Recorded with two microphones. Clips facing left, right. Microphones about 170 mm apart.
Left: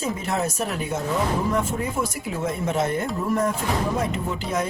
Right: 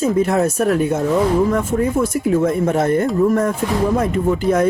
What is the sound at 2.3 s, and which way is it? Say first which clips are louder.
Speech: right 10 dB; 55° right (ahead or behind).